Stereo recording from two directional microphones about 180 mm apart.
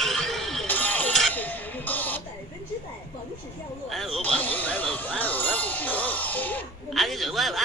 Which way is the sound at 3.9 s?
Centre (ahead or behind).